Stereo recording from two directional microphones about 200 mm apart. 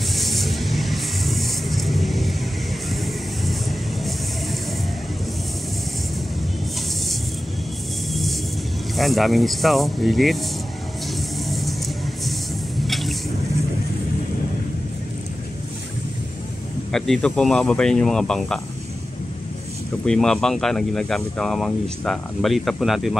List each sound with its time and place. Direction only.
0.1 s vehicle: centre (ahead or behind)
8.1 s music: centre (ahead or behind)
8.9 s speech: centre (ahead or behind)
11.4 s vehicle: centre (ahead or behind)
12.8 s a sound: centre (ahead or behind)
16.9 s speech: centre (ahead or behind)
20.1 s speech: 5° left (ahead or behind)